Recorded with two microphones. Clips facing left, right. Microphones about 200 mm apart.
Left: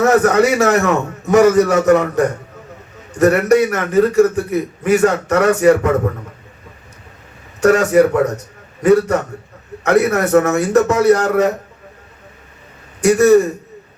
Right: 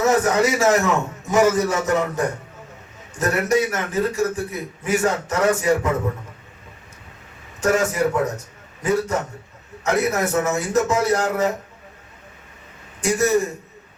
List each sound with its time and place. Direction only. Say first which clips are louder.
0.0 s a man's voice: left 6 dB; 65° left (ahead or behind)
7.6 s a man's voice: left 8 dB; 65° left (ahead or behind)
13.0 s a man's voice: left 9 dB; 65° left (ahead or behind)